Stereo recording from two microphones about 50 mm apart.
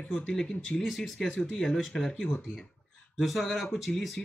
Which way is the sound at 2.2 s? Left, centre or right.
Left.